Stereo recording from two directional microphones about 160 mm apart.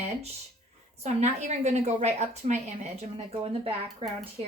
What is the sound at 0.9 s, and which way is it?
A woman's voice, 45° right (ahead or behind).